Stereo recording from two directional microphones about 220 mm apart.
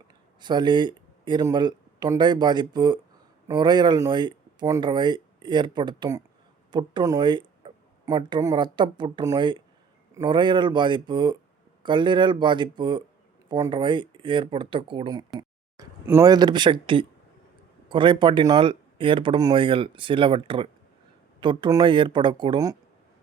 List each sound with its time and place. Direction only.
0.3 s speech: 20° right (ahead or behind)